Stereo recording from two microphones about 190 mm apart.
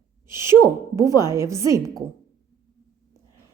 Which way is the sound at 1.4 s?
15° right (ahead or behind).